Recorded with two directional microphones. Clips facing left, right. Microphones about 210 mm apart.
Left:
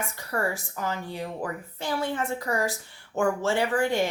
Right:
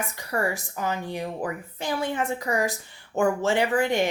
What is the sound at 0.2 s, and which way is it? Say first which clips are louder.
Speech: right 2 dB; 15° right (ahead or behind).